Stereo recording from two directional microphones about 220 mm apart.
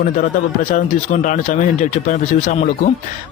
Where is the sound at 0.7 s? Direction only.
35° left (ahead or behind).